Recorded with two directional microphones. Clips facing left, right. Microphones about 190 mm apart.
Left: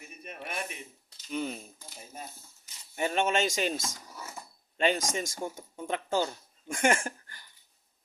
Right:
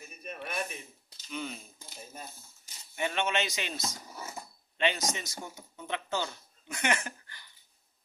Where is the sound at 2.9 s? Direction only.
40° left (ahead or behind).